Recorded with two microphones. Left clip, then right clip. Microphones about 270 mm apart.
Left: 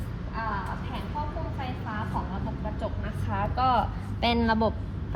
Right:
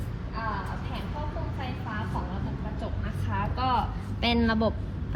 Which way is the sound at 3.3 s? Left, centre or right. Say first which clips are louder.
Left 3 dB; left.